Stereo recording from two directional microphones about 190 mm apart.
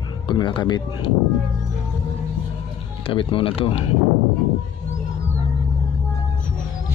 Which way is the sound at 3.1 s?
25° left (ahead or behind).